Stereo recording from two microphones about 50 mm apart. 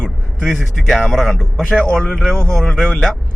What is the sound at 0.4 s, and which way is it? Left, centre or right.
A man's voice, centre.